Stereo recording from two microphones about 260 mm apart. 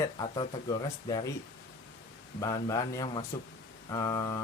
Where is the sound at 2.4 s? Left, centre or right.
Centre.